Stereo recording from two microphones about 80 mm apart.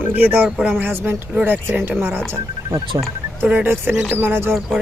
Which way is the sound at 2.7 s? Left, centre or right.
Right.